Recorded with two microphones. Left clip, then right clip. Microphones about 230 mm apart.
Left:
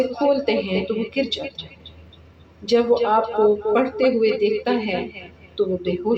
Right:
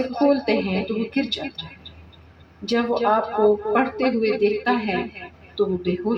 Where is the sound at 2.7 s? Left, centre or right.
Right.